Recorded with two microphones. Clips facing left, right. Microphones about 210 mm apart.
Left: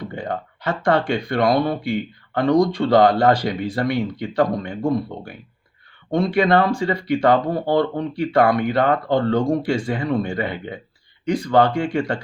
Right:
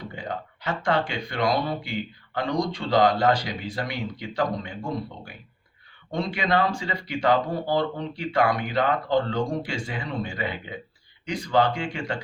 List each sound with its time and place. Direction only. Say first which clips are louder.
0.2 s speech: left 5 dB; 55° left (ahead or behind)